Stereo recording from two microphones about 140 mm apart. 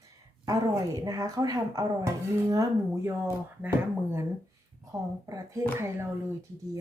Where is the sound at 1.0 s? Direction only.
25° right (ahead or behind).